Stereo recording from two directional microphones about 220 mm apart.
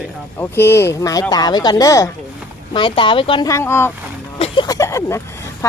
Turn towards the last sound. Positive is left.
turn(degrees=15)  # may be behind; listen again after turning